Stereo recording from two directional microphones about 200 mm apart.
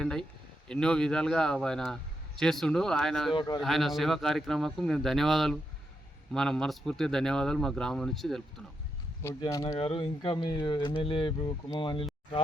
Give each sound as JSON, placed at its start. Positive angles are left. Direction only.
{"t": 0.0, "sound": "a man's voice", "side_deg": 5}
{"t": 3.3, "sound": "speech", "side_deg": 20}
{"t": 3.6, "sound": "a man's voice", "side_deg": 0}
{"t": 9.2, "sound": "speech", "side_deg": 15}